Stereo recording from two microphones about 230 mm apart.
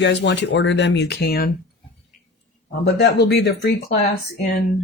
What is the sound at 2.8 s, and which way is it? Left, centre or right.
Speech, left.